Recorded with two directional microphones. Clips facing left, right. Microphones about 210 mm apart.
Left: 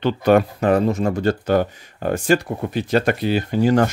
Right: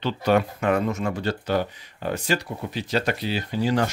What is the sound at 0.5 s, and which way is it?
Speech, 35° left (ahead or behind).